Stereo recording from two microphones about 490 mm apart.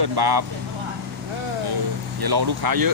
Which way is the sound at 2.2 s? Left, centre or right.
Right.